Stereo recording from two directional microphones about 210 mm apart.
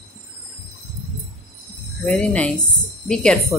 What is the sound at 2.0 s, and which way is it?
Speech, 5° left (ahead or behind).